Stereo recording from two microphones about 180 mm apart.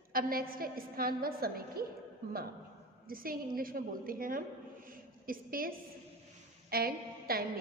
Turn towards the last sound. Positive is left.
turn(degrees=-55)  # may be behind; listen again after turning